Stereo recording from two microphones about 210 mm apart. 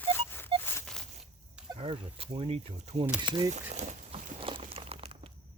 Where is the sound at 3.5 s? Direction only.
35° right (ahead or behind).